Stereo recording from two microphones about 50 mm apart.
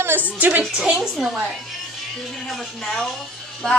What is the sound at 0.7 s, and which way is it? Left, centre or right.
Speech, centre.